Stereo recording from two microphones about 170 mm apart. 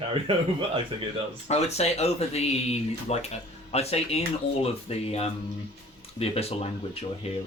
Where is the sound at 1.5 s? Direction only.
40° left (ahead or behind).